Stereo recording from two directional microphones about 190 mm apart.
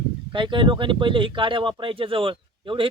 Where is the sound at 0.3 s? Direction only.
25° right (ahead or behind).